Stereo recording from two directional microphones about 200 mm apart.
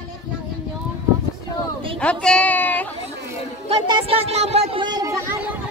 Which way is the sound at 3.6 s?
25° right (ahead or behind).